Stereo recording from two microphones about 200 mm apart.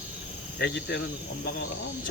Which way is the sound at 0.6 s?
55° left (ahead or behind).